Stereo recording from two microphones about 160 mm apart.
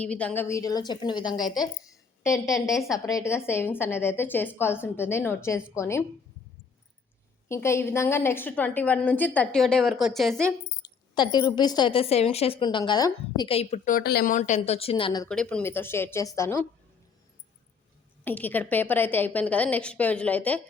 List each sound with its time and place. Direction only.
0.0 s a woman's voice: 5° left (ahead or behind)
7.4 s a woman's voice: 15° left (ahead or behind)
10.8 s a woman's voice: 25° left (ahead or behind)
13.5 s a woman's voice: 40° left (ahead or behind)
14.0 s a woman's voice: 75° left (ahead or behind)
14.3 s speech: 50° left (ahead or behind); by 15.2 s 35° left (ahead or behind)
15.3 s a woman's voice: 5° left (ahead or behind)
18.3 s a woman's voice: 10° left (ahead or behind)